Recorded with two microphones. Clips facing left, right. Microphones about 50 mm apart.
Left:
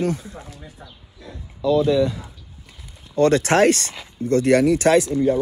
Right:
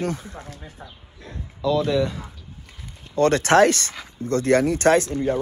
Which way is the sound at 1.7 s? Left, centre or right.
Right.